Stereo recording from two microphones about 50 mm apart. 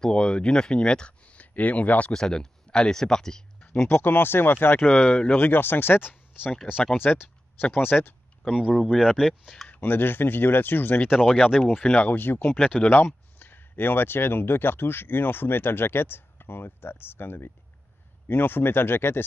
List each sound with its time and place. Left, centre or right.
0.0 s speech: centre
2.1 s speech: centre
3.7 s speech: left
4.8 s speech: left
8.7 s speech: centre
9.7 s speech: left
11.1 s speech: centre
11.8 s speech: left
12.2 s speech: left